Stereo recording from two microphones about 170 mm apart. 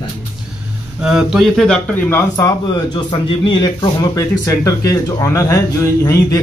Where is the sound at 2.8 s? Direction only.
25° left (ahead or behind).